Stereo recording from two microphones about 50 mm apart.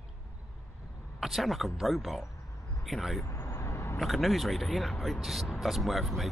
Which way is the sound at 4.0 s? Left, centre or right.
Centre.